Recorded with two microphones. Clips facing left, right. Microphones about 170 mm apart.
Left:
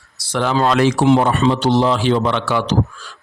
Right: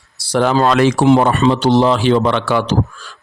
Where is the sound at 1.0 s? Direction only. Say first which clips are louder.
Right 3 dB; 50° right (ahead or behind).